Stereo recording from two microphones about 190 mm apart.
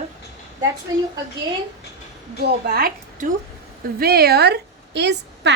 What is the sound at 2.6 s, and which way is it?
A woman's voice, 50° right (ahead or behind).